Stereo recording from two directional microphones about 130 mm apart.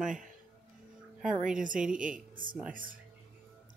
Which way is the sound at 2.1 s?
90° right.